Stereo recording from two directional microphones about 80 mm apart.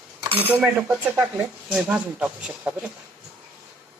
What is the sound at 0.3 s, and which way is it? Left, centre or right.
Dishes, right.